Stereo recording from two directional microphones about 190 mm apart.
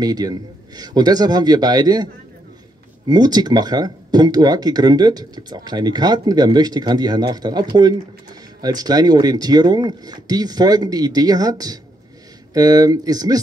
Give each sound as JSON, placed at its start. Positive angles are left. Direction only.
{"t": 0.0, "sound": "speech", "side_deg": -20}
{"t": 3.1, "sound": "speech", "side_deg": -20}